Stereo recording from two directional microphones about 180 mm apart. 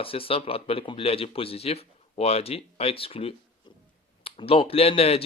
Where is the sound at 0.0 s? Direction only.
30° left (ahead or behind).